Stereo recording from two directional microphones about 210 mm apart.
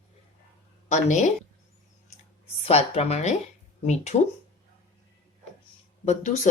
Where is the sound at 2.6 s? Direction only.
30° left (ahead or behind).